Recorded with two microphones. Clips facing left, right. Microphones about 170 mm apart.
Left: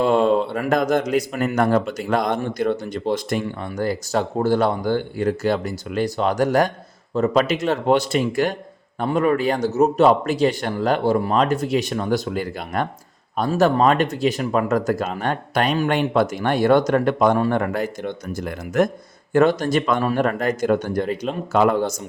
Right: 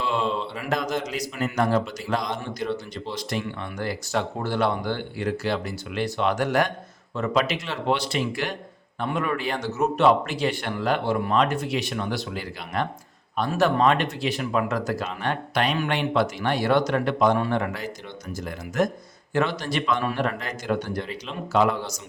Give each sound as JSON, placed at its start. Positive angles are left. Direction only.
{"t": 0.0, "sound": "a man's voice", "side_deg": 50}
{"t": 19.3, "sound": "speech", "side_deg": 45}